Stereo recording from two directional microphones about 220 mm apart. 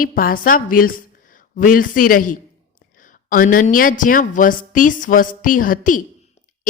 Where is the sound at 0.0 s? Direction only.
40° left (ahead or behind).